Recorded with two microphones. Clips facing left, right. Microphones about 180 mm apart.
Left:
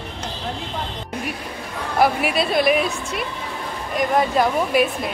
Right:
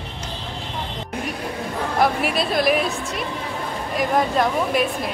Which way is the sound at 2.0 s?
Centre (ahead or behind).